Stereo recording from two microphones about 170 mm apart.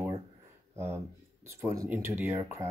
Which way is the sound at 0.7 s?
15° right (ahead or behind).